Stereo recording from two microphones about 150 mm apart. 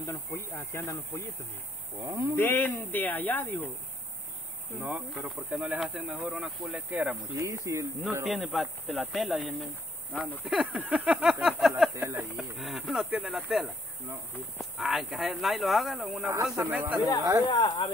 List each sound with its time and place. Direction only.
0.0 s speech: 20° left (ahead or behind)
2.0 s speech: 20° right (ahead or behind)
2.3 s speech: 15° left (ahead or behind)
4.7 s speech: 10° right (ahead or behind)
7.3 s speech: 20° right (ahead or behind)
8.3 s speech: centre (ahead or behind)
11.9 s speech: 20° right (ahead or behind)
12.4 s speech: centre (ahead or behind)
16.5 s speech: 15° right (ahead or behind)
17.5 s speech: 30° left (ahead or behind)